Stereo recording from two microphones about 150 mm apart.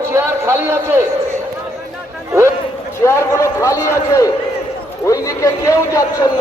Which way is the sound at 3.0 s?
20° left (ahead or behind).